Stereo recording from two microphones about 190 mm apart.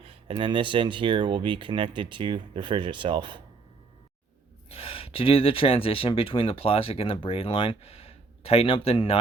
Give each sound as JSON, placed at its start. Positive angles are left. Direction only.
{"t": 0.0, "sound": "speech", "side_deg": -30}
{"t": 4.7, "sound": "speech", "side_deg": 30}